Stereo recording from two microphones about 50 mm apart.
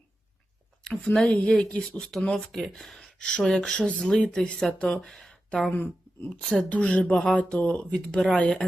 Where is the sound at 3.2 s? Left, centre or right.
Left; by 5.3 s centre.